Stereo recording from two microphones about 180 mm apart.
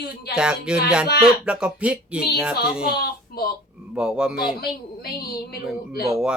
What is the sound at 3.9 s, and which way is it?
Speech, 5° right (ahead or behind).